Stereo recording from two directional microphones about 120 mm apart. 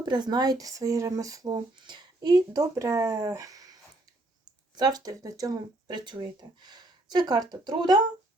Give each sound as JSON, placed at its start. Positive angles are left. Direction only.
{"t": 0.0, "sound": "speech", "side_deg": -35}